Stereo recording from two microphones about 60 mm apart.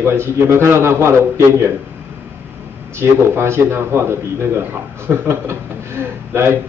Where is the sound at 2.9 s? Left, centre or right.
Right.